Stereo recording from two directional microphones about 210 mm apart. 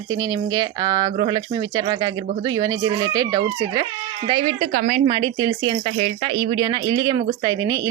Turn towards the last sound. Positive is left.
turn(degrees=-20)  # may be behind; listen again after turning